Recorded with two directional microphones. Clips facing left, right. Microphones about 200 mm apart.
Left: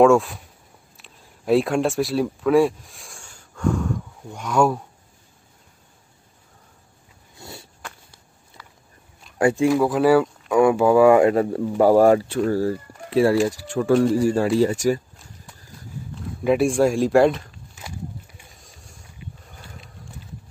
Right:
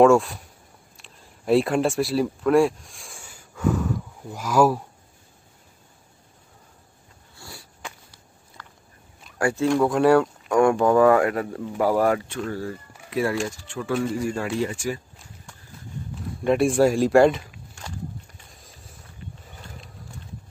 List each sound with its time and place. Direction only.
0.0 s speech: centre (ahead or behind)
7.3 s a sound: 20° left (ahead or behind)
9.4 s speech: 20° left (ahead or behind)
9.7 s speech: 5° left (ahead or behind)
11.1 s speech: 25° left (ahead or behind)
13.7 s speech: 40° left (ahead or behind)
16.4 s speech: centre (ahead or behind)
18.5 s a sound: centre (ahead or behind)